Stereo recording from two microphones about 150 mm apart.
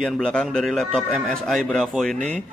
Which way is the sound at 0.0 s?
5° left (ahead or behind).